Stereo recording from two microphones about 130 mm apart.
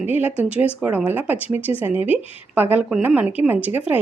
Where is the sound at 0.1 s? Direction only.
10° right (ahead or behind).